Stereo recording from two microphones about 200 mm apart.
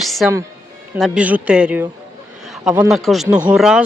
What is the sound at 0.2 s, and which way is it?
Speech, 5° right (ahead or behind).